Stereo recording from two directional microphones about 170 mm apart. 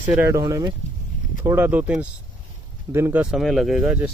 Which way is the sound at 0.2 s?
20° right (ahead or behind).